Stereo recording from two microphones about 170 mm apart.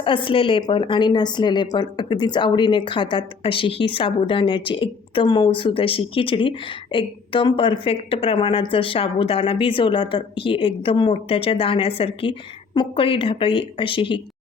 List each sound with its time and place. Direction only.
0.0 s a woman's voice: 30° left (ahead or behind)